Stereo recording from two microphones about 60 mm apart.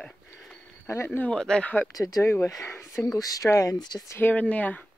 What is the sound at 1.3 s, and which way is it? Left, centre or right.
Speech, centre.